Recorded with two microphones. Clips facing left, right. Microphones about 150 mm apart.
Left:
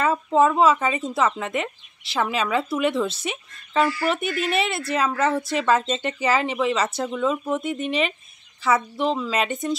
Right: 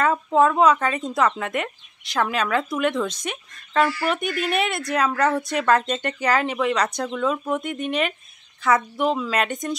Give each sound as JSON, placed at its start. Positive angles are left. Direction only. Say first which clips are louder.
{"t": 0.0, "sound": "speech", "louder": "even", "side_deg": 5}